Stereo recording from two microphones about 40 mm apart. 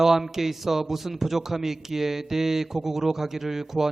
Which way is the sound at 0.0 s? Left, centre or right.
Centre.